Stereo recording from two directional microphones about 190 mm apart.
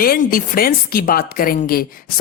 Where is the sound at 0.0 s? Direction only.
50° left (ahead or behind).